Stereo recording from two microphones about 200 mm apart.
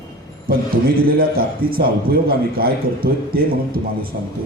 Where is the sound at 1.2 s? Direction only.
50° right (ahead or behind).